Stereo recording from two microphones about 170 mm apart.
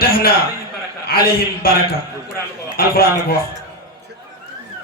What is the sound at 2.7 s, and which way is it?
Speech, 60° left (ahead or behind).